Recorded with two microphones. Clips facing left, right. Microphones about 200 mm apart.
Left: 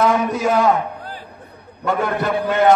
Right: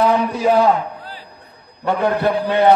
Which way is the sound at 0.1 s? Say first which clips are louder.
Right 2 dB; 45° left (ahead or behind).